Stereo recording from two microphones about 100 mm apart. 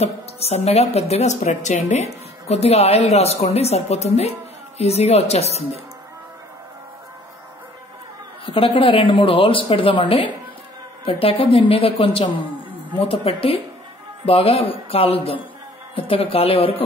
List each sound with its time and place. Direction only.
0.0 s a woman's voice: 90° left
8.5 s a woman's voice: 60° left (ahead or behind)